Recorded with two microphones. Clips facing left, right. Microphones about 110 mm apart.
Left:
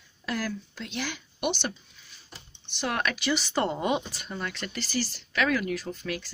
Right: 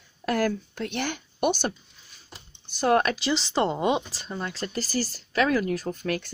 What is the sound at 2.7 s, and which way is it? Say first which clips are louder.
Speech: right 8 dB; 40° right (ahead or behind).